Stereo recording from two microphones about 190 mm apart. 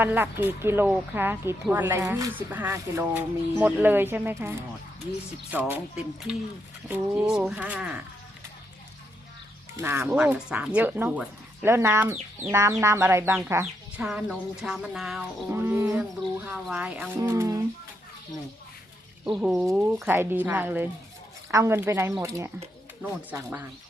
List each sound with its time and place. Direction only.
0.0 s speech: 10° right (ahead or behind)
6.8 s speech: 10° right (ahead or behind)
9.7 s speech: 10° right (ahead or behind)
19.4 s speech: centre (ahead or behind)
20.1 s speech: 10° right (ahead or behind)